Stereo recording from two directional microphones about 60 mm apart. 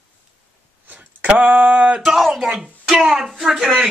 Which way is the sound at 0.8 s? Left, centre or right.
Right.